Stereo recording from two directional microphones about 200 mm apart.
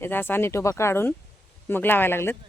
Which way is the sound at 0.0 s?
10° left (ahead or behind).